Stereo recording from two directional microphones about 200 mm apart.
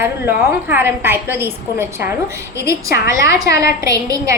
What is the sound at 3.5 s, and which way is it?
Speech, 15° right (ahead or behind).